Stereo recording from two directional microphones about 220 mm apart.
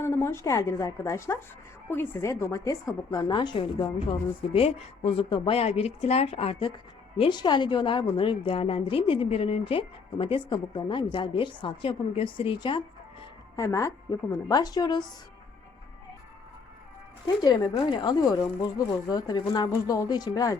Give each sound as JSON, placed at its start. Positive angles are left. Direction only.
{"t": 0.0, "sound": "a woman's voice", "side_deg": 10}
{"t": 17.2, "sound": "a woman's voice", "side_deg": 20}